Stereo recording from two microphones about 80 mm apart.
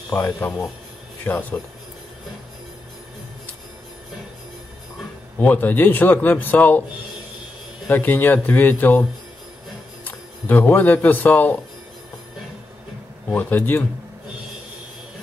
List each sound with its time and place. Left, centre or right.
0.4 s a man's voice: left
5.4 s a man's voice: left
7.9 s a man's voice: left
10.0 s speech: left
13.3 s a man's voice: left